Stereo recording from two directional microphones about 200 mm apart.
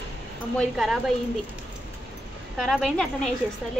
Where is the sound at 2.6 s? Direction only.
Centre (ahead or behind).